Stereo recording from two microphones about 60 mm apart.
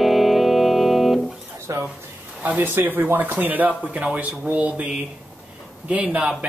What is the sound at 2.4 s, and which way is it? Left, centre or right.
Speech, right.